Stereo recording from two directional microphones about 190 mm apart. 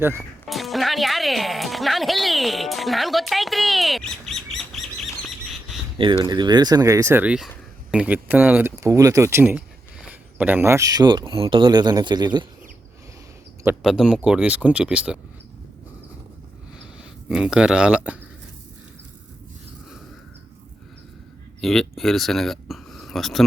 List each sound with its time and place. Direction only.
0.4 s speech: centre (ahead or behind)
6.2 s speech: 20° right (ahead or behind)
13.7 s speech: centre (ahead or behind)
17.0 s speech: 5° right (ahead or behind)
21.6 s speech: centre (ahead or behind)